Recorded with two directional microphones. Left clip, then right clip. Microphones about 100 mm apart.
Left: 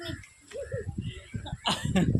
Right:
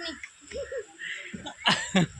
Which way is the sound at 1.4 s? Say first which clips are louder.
Right 5 dB; 10° right (ahead or behind).